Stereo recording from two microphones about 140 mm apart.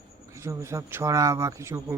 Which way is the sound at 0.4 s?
20° right (ahead or behind).